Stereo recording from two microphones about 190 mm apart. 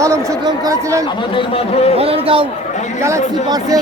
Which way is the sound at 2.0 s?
30° right (ahead or behind).